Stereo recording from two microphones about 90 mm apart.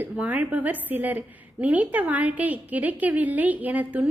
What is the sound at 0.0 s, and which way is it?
A woman's voice, 20° right (ahead or behind).